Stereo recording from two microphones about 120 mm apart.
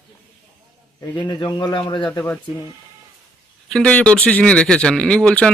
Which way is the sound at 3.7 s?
10° left (ahead or behind).